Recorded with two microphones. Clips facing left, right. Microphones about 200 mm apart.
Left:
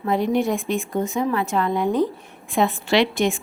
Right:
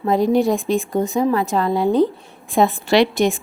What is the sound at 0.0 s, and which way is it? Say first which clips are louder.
A woman's voice: right 4 dB; 35° right (ahead or behind).